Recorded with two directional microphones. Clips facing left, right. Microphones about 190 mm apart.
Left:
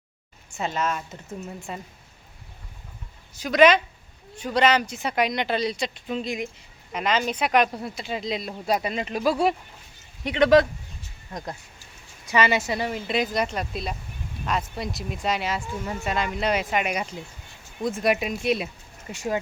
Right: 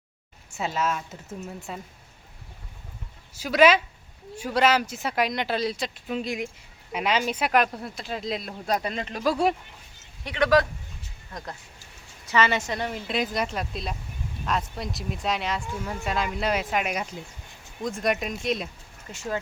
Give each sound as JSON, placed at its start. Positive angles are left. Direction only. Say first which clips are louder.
{"t": 0.5, "sound": "speech", "louder": "even", "side_deg": -5}
{"t": 3.3, "sound": "speech", "louder": "left 2 dB", "side_deg": -5}
{"t": 10.2, "sound": "a man's voice", "louder": "left 4 dB", "side_deg": 20}